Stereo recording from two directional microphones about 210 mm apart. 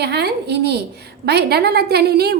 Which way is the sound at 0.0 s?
50° right (ahead or behind).